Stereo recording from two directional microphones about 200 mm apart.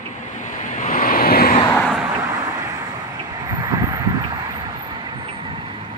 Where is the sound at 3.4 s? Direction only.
20° right (ahead or behind).